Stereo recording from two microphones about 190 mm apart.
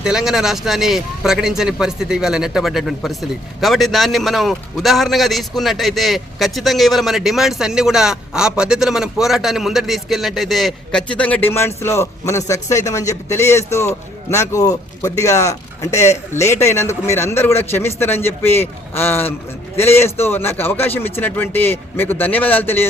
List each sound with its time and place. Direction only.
0.0 s a man's voice: 5° right (ahead or behind)